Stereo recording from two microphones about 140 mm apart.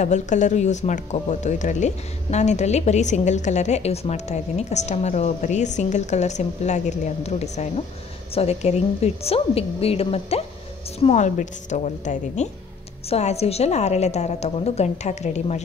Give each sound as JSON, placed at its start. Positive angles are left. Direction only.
{"t": 0.0, "sound": "a woman's voice", "side_deg": 60}